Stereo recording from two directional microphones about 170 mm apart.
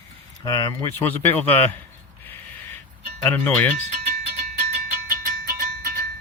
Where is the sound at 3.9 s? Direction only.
50° right (ahead or behind).